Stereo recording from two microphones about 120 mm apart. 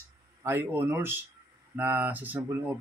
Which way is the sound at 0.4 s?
20° right (ahead or behind).